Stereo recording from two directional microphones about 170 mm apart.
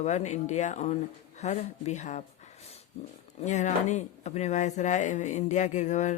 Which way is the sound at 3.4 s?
45° left (ahead or behind).